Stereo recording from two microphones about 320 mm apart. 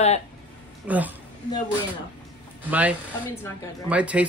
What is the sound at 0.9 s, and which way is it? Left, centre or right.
Speech, centre.